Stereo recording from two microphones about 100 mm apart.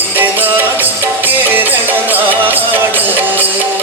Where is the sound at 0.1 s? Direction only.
20° right (ahead or behind).